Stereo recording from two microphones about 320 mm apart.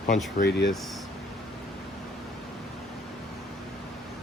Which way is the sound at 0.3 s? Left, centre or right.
Left.